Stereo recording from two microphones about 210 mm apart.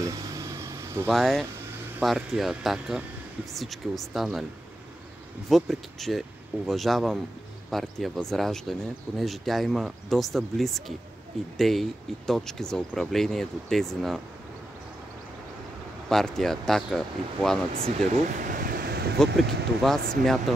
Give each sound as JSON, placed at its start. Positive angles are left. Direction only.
{"t": 0.0, "sound": "vehicle", "side_deg": -15}
{"t": 1.0, "sound": "speech", "side_deg": 0}
{"t": 5.5, "sound": "speech", "side_deg": 0}
{"t": 16.1, "sound": "speech", "side_deg": 0}
{"t": 17.8, "sound": "a sound", "side_deg": -35}
{"t": 19.8, "sound": "speech", "side_deg": 0}